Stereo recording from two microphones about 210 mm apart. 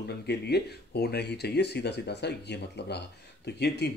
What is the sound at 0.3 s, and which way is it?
Speech, 50° left (ahead or behind).